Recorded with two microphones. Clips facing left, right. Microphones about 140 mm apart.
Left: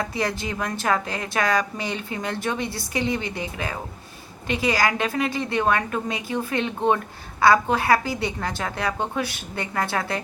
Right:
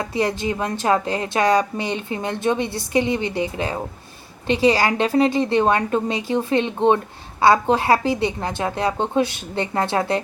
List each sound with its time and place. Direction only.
0.0 s a woman's voice: 25° right (ahead or behind)